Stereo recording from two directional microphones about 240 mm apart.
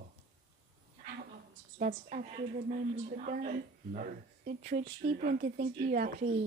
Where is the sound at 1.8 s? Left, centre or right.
Right.